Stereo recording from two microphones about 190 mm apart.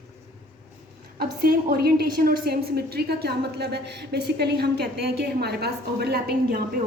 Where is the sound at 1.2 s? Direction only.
50° right (ahead or behind).